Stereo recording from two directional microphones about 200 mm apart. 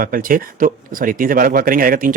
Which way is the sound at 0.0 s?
45° right (ahead or behind).